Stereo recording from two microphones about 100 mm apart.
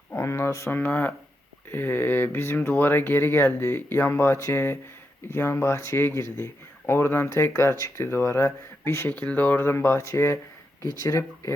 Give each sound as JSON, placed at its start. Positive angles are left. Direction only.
{"t": 0.2, "sound": "speech", "side_deg": 25}
{"t": 1.7, "sound": "speech", "side_deg": 20}